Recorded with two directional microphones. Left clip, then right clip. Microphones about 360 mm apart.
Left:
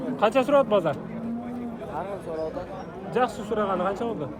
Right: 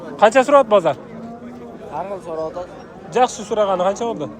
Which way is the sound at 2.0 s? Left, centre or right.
Right.